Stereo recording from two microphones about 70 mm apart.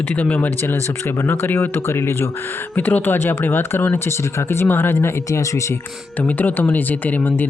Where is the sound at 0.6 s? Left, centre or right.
Left.